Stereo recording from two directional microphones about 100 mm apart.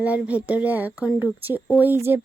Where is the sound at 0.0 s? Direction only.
15° right (ahead or behind).